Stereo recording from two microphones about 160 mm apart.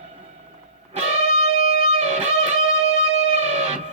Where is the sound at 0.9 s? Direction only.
40° right (ahead or behind).